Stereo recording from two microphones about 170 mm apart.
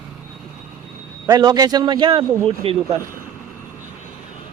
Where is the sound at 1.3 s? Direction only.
25° right (ahead or behind).